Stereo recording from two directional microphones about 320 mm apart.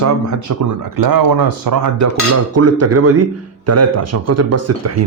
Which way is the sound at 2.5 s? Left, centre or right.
Right.